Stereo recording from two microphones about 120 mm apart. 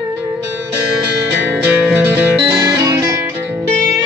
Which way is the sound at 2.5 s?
35° right (ahead or behind).